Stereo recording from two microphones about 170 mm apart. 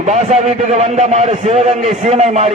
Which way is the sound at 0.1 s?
40° right (ahead or behind).